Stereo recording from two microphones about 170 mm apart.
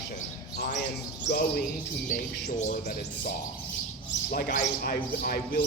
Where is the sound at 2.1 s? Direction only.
50° left (ahead or behind).